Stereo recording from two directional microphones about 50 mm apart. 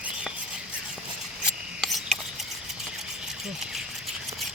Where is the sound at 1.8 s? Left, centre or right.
Centre.